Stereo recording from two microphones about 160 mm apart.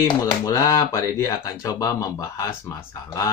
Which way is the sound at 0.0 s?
20° left (ahead or behind).